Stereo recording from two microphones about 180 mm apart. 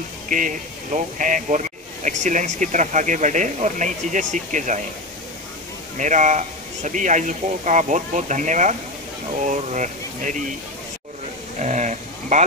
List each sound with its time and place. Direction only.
0.3 s speech: 45° right (ahead or behind)
5.9 s speech: 45° right (ahead or behind)
11.6 s a sound: 40° right (ahead or behind)